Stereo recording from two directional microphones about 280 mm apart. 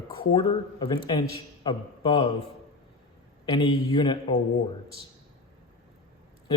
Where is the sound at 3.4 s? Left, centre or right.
Centre.